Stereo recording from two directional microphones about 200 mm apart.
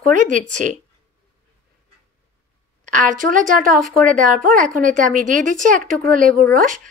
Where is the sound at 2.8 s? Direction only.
40° right (ahead or behind).